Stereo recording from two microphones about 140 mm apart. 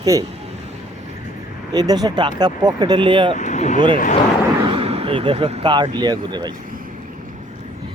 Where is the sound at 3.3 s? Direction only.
60° left (ahead or behind).